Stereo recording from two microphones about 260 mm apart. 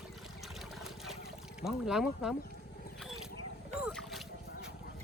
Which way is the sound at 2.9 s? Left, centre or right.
Centre.